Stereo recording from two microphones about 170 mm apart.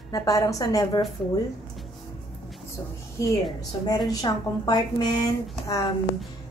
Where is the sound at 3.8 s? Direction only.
20° left (ahead or behind).